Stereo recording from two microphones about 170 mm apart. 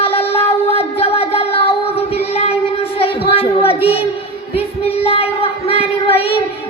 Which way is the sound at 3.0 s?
35° left (ahead or behind).